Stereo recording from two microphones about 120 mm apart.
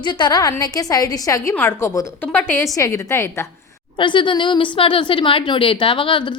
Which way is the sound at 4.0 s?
40° left (ahead or behind).